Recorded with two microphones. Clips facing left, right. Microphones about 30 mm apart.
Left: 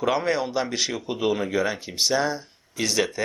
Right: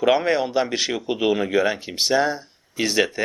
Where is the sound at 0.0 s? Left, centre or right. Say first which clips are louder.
Right 4 dB; right.